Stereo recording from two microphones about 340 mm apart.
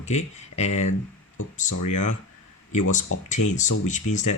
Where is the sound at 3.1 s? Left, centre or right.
Left.